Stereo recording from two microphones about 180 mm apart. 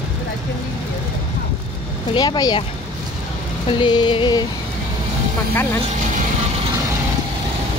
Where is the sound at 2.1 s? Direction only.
25° left (ahead or behind).